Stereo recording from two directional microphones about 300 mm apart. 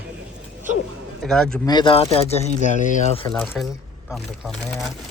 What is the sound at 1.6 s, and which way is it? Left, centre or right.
Speech, centre.